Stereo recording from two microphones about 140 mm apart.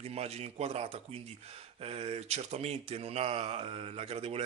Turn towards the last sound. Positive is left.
turn(degrees=-45)  # may be behind; listen again after turning